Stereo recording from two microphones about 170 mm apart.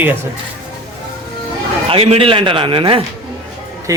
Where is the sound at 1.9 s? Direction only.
35° right (ahead or behind).